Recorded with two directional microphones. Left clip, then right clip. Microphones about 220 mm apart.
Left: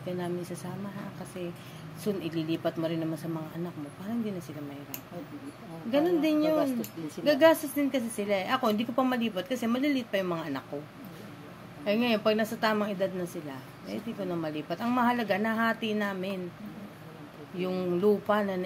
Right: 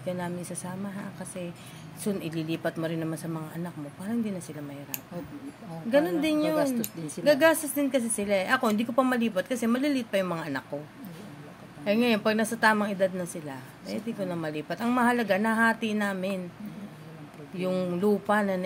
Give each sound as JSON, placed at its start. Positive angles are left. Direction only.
{"t": 0.0, "sound": "a woman's voice", "side_deg": -25}
{"t": 2.1, "sound": "a woman's voice", "side_deg": -25}
{"t": 5.9, "sound": "a woman's voice", "side_deg": -25}
{"t": 11.8, "sound": "a woman's voice", "side_deg": -25}
{"t": 17.6, "sound": "a woman's voice", "side_deg": -25}